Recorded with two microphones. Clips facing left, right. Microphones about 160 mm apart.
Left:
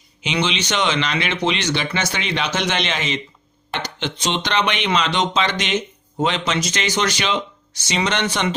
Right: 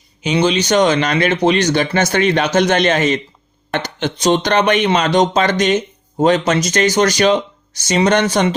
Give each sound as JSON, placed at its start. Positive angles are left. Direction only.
{"t": 0.4, "sound": "speech", "side_deg": -40}